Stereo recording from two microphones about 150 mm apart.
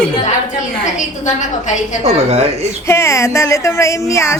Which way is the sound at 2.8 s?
20° left (ahead or behind).